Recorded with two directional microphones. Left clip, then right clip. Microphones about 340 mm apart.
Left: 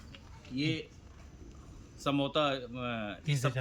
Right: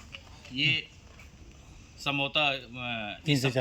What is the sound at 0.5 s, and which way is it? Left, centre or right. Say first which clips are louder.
Speech: right 8 dB; centre.